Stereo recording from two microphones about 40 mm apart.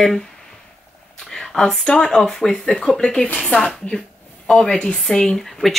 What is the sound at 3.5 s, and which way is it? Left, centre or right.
Speech, left.